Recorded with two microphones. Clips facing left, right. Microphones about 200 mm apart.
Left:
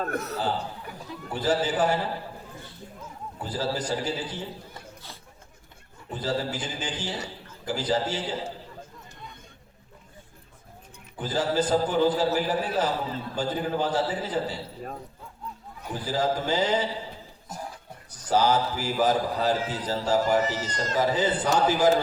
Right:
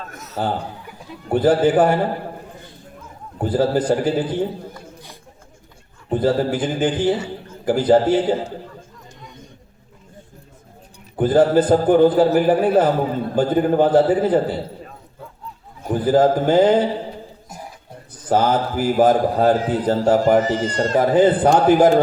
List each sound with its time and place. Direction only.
0.1 s speech: 60° left (ahead or behind)
0.3 s a man's voice: 55° right (ahead or behind)
3.3 s a man's voice: 55° right (ahead or behind)
6.1 s a man's voice: 55° right (ahead or behind)
11.2 s a man's voice: 55° right (ahead or behind)
15.8 s a man's voice: 55° right (ahead or behind)
18.3 s a man's voice: 55° right (ahead or behind)